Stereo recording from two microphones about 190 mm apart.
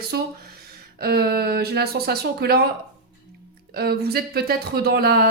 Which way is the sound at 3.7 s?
55° right (ahead or behind).